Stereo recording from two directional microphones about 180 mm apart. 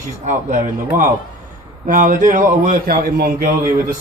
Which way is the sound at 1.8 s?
45° right (ahead or behind).